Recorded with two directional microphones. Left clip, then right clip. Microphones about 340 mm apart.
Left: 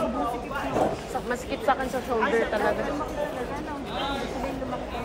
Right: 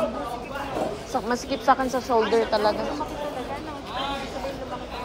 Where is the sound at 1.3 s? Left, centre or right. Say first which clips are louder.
Right 4 dB; centre.